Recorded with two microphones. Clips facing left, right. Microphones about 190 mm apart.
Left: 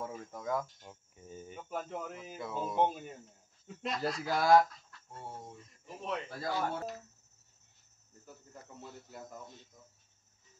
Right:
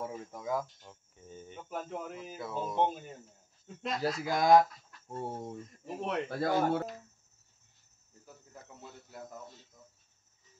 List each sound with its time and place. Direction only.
0.0 s speech: 10° right (ahead or behind)
0.8 s cricket: 10° left (ahead or behind)
3.6 s speech: centre (ahead or behind); by 4.6 s 20° right (ahead or behind)
5.0 s speech: 45° right (ahead or behind)
5.9 s speech: 65° right (ahead or behind)